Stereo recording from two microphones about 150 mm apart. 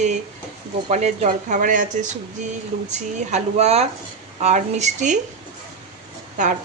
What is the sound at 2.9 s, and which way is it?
Speech, 50° right (ahead or behind).